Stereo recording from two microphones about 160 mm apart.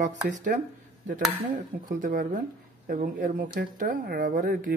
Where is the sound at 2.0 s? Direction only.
60° right (ahead or behind).